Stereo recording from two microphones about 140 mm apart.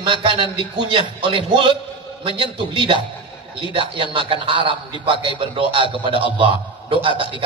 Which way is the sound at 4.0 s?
40° right (ahead or behind).